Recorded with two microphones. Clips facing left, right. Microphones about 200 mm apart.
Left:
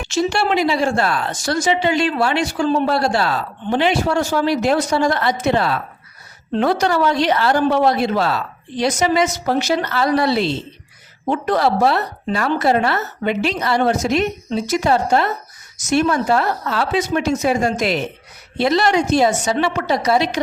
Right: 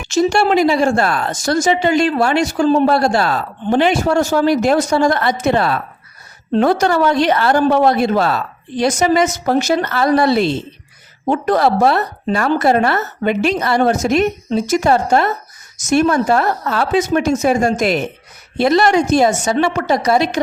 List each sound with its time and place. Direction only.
0.1 s speech: 45° right (ahead or behind)